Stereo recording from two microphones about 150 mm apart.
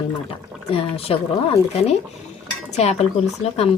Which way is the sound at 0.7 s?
40° left (ahead or behind).